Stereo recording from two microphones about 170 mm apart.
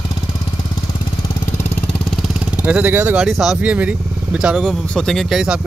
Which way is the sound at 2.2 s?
5° right (ahead or behind).